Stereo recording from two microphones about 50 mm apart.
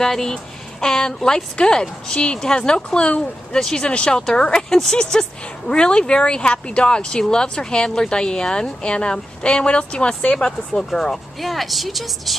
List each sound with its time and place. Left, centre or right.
0.0 s speech: centre